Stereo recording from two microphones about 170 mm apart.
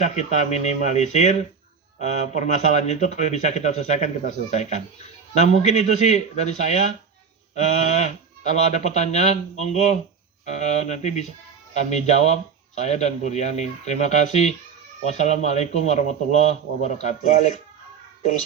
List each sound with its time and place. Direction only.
0.0 s speech: 45° left (ahead or behind)